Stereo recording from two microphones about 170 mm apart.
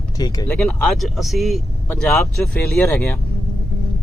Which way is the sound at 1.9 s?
10° left (ahead or behind).